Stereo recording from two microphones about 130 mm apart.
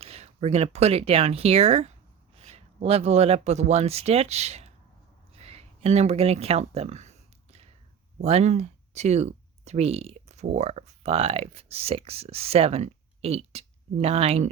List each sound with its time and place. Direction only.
0.0 s speech: 50° right (ahead or behind)
5.3 s a sound: 55° right (ahead or behind)
8.2 s speech: 55° right (ahead or behind)